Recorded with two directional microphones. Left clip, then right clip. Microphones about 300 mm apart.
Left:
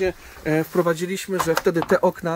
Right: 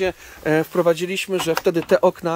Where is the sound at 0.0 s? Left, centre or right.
Centre.